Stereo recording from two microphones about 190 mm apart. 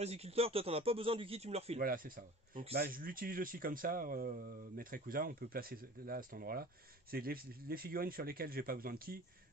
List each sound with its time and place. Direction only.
0.0 s speech: 35° right (ahead or behind)
1.8 s speech: 50° right (ahead or behind)